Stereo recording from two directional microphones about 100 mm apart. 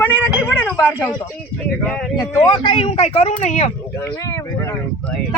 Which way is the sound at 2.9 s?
90° left.